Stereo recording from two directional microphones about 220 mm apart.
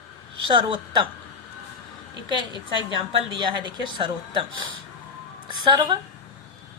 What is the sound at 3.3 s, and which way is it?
Speech, 20° right (ahead or behind).